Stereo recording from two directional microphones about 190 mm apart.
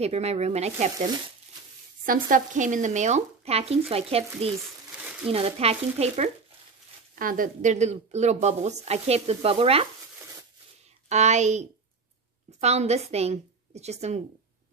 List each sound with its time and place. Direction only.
0.0 s speech: 35° right (ahead or behind)
2.0 s speech: 45° right (ahead or behind)
7.2 s speech: 45° right (ahead or behind); by 9.8 s 30° right (ahead or behind)
11.1 s speech: 35° right (ahead or behind)